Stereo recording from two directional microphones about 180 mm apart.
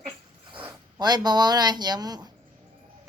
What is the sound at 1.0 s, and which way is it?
A woman's voice, 20° right (ahead or behind).